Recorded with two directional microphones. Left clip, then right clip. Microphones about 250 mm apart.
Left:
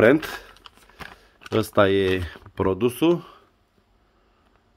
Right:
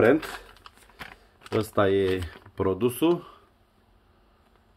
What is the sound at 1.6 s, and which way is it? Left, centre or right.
Speech, left.